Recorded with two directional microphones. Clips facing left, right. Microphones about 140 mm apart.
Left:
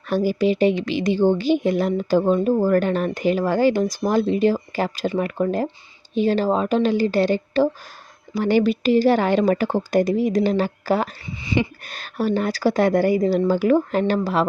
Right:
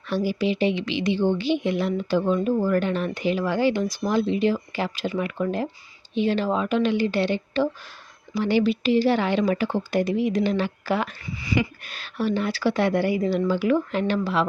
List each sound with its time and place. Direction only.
0.1 s a woman's voice: 45° left (ahead or behind)
11.3 s speech: 25° left (ahead or behind)
11.8 s a woman's voice: 45° left (ahead or behind)